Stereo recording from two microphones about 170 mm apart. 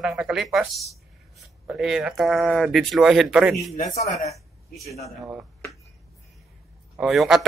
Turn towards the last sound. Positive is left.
turn(degrees=0)  # may be behind; listen again after turning